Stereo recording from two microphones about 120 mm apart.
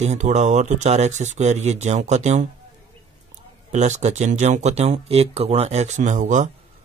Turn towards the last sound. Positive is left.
turn(degrees=-90)